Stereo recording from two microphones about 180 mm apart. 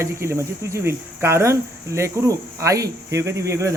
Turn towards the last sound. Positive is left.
turn(degrees=-15)  # may be behind; listen again after turning